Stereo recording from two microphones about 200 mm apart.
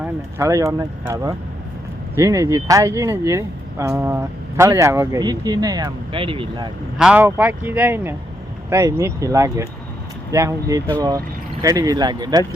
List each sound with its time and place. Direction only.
0.0 s speech: 15° right (ahead or behind)
7.0 s speech: 10° right (ahead or behind)